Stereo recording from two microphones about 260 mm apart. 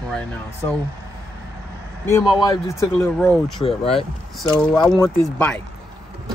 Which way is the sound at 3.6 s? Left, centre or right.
Left.